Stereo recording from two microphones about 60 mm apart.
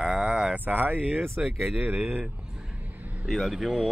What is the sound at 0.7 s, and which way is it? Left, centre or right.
Speech, right.